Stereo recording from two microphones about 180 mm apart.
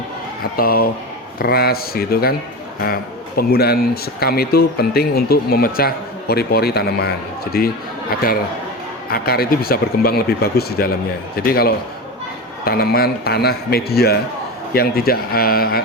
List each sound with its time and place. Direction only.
0.5 s speech: 55° left (ahead or behind)
9.0 s speech: 55° left (ahead or behind)